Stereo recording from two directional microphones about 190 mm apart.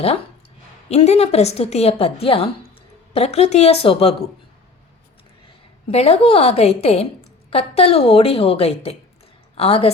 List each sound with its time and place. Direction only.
0.9 s a woman's voice: 35° left (ahead or behind)
5.9 s a woman's voice: 30° left (ahead or behind)